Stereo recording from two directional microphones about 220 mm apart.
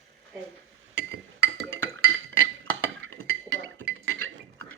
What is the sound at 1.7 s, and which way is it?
Music, 60° right (ahead or behind).